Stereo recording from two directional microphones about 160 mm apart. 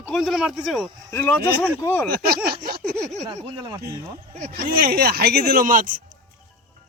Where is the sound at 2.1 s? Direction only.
75° right (ahead or behind).